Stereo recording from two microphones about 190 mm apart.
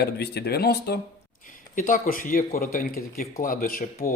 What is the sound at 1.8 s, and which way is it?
Speech, 45° left (ahead or behind).